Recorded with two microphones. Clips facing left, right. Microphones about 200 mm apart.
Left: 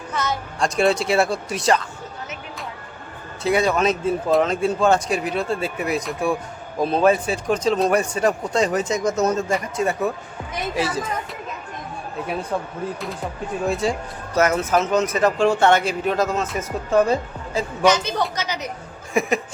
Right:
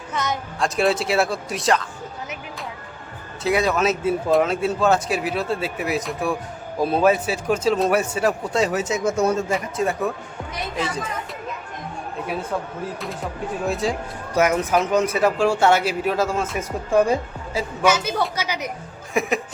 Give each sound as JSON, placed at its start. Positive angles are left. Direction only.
{"t": 0.1, "sound": "speech", "side_deg": -20}
{"t": 0.6, "sound": "speech", "side_deg": 0}
{"t": 3.4, "sound": "speech", "side_deg": 0}
{"t": 13.7, "sound": "speech", "side_deg": 0}
{"t": 14.3, "sound": "speech", "side_deg": -15}
{"t": 19.2, "sound": "speech", "side_deg": 0}